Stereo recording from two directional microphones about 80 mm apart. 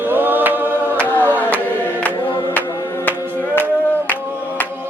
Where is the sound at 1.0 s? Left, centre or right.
Left.